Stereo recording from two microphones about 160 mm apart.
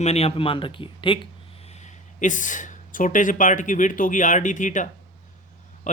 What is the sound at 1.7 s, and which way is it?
Speech, 45° left (ahead or behind).